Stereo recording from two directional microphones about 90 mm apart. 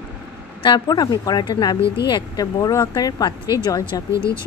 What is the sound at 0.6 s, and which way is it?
Speech, 55° left (ahead or behind).